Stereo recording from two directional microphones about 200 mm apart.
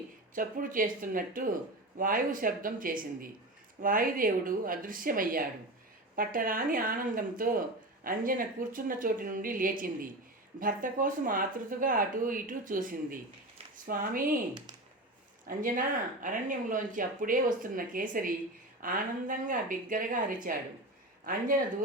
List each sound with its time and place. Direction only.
0.3 s speech: 45° right (ahead or behind)
15.4 s speech: 40° right (ahead or behind)